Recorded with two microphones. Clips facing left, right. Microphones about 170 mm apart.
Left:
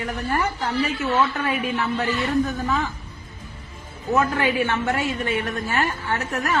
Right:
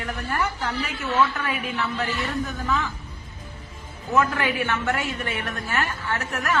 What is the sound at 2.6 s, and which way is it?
Speech, 45° left (ahead or behind).